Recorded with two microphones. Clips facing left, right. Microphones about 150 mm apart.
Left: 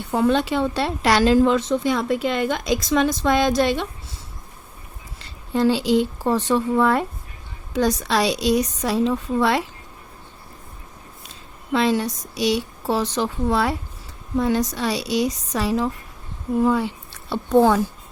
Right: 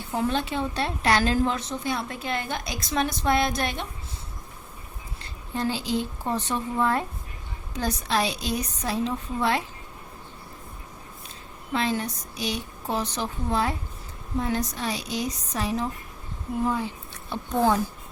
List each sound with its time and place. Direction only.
0.1 s a woman's voice: 70° left (ahead or behind); by 3.8 s 90° left
5.5 s a woman's voice: 85° left
11.7 s a woman's voice: 90° left